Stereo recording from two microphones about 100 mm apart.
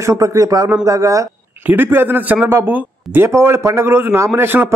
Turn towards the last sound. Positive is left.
turn(degrees=-20)  # may be behind; listen again after turning